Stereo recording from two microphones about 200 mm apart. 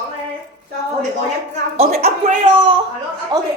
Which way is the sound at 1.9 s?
50° right (ahead or behind).